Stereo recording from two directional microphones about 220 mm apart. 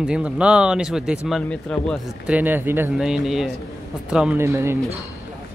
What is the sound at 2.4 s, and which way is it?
Speech, 10° right (ahead or behind).